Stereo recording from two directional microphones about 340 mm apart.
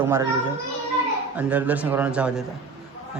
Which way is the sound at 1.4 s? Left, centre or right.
Centre.